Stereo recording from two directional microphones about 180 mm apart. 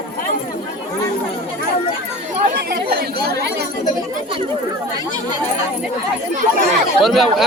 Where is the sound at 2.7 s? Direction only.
55° right (ahead or behind).